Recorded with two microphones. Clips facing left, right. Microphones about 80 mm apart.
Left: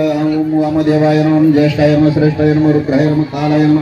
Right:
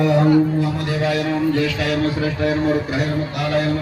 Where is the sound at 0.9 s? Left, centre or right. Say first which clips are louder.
Left 10 dB; left.